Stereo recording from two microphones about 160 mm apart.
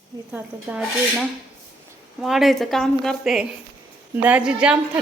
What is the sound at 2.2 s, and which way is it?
A woman's voice, centre (ahead or behind).